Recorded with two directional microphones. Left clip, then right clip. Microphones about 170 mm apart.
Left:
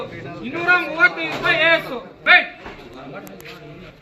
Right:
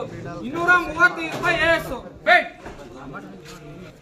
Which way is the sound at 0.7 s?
10° right (ahead or behind).